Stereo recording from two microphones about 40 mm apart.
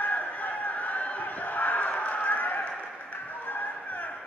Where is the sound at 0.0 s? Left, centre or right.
Left.